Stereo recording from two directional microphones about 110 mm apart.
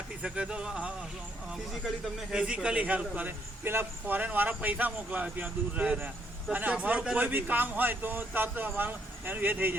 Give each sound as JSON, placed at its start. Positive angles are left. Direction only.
{"t": 0.2, "sound": "a man's voice", "side_deg": -10}
{"t": 2.3, "sound": "a man's voice", "side_deg": -10}